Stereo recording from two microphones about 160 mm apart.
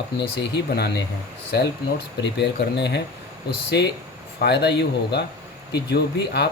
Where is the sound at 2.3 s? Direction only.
90° left.